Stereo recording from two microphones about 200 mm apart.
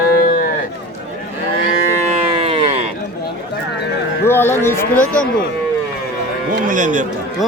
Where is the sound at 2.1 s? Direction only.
30° right (ahead or behind).